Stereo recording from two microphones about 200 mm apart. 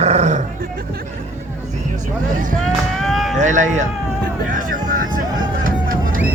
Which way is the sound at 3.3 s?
40° right (ahead or behind).